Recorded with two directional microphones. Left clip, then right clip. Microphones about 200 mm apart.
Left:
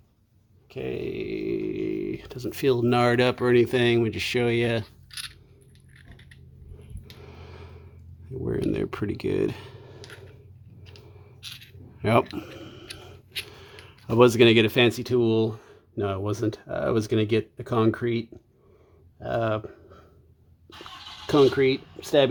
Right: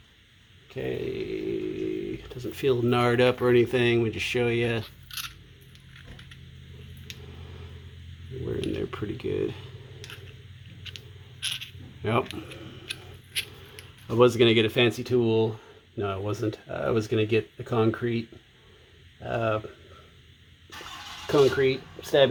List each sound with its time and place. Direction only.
0.7 s speech: 45° left (ahead or behind)
7.2 s a sound: 45° left (ahead or behind)
10.9 s coin: 5° right (ahead or behind)
12.0 s speech: 50° left (ahead or behind)
12.5 s a sound: 40° left (ahead or behind)
13.5 s speech: 45° left (ahead or behind)
21.2 s speech: 45° left (ahead or behind)